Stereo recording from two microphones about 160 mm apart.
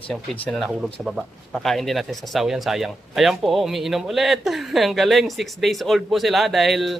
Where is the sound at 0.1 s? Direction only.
5° left (ahead or behind).